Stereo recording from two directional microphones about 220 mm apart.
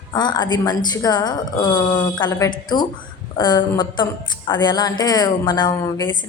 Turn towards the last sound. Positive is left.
turn(degrees=20)  # may be behind; listen again after turning